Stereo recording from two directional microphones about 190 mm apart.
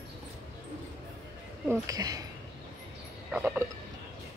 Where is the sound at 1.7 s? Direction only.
20° right (ahead or behind).